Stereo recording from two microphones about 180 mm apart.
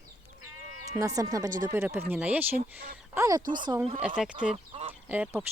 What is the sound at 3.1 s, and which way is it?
Speech, 20° right (ahead or behind).